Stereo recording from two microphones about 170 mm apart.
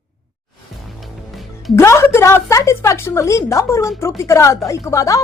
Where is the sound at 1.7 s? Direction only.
15° left (ahead or behind).